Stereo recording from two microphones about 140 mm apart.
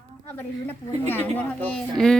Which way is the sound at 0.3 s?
15° left (ahead or behind).